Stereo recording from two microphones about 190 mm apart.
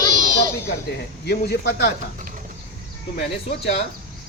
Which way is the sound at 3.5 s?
35° left (ahead or behind).